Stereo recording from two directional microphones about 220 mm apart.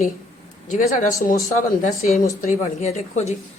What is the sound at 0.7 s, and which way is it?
A woman's voice, 35° left (ahead or behind).